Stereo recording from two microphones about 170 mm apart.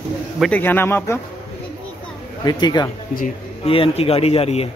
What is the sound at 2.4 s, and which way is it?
Speech, 25° left (ahead or behind).